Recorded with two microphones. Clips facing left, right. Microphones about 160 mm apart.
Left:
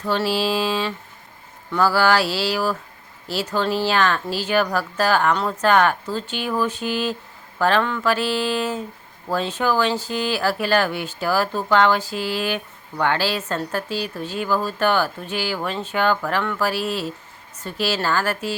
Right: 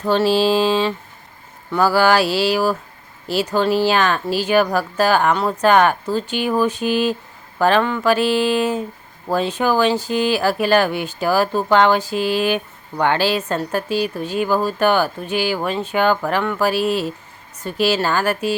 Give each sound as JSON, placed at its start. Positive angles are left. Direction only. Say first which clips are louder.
{"t": 0.1, "sound": "mantra", "louder": "right 6 dB", "side_deg": -25}
{"t": 1.7, "sound": "speech", "louder": "right 3 dB", "side_deg": -15}